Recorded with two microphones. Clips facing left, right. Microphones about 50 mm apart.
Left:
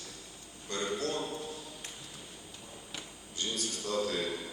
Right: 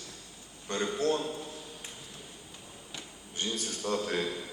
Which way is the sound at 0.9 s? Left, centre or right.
Right.